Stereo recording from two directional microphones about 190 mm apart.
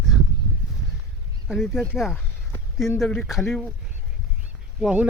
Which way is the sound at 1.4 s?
Centre (ahead or behind).